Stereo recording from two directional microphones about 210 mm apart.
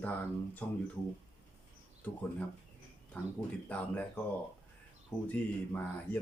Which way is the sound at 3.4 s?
10° left (ahead or behind).